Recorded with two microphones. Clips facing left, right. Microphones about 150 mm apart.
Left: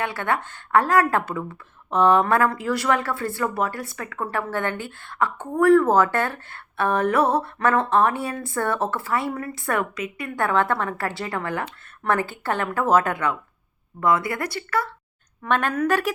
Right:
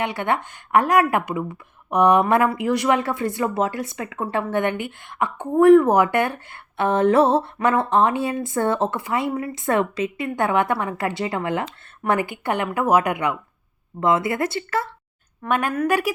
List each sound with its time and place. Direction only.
0.0 s a woman's voice: 20° right (ahead or behind)
15.4 s a woman's voice: 10° right (ahead or behind)